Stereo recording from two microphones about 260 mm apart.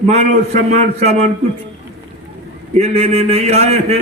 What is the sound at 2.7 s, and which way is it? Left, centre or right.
A man's voice, right.